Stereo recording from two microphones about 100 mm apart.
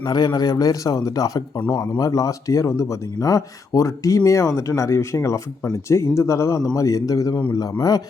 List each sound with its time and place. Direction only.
0.0 s speech: 45° left (ahead or behind)